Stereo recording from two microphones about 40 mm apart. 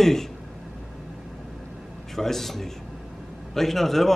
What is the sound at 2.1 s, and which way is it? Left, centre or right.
A man's voice, centre.